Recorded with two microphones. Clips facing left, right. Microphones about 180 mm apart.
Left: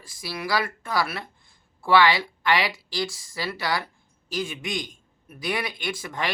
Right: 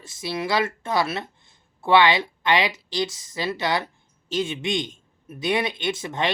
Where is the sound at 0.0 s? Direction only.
25° right (ahead or behind).